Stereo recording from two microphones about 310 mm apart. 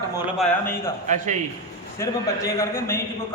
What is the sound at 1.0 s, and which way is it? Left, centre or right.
Speech, right.